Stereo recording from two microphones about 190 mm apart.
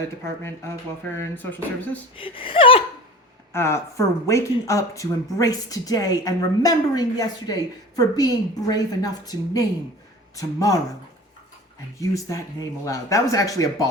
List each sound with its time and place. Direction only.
1.1 s speech: 10° left (ahead or behind)
2.1 s speech: 30° left (ahead or behind)
3.5 s speech: 15° left (ahead or behind)
11.9 s speech: 15° left (ahead or behind)